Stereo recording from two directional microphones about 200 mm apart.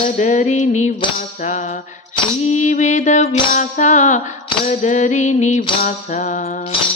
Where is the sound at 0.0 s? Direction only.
40° left (ahead or behind).